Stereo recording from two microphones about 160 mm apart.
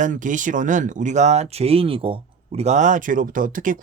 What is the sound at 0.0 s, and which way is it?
Speech, 55° right (ahead or behind).